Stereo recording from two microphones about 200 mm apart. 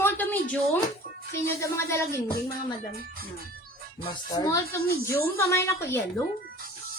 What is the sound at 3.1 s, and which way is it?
Speech, 45° right (ahead or behind).